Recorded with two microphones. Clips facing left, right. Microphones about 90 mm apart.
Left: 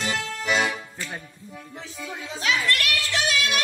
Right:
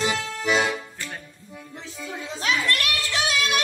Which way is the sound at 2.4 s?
35° right (ahead or behind).